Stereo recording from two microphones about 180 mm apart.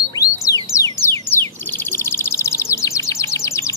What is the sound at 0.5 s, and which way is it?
Music, 20° left (ahead or behind).